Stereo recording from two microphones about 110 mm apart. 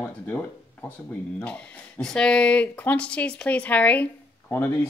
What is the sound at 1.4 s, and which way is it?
Speech, 10° left (ahead or behind).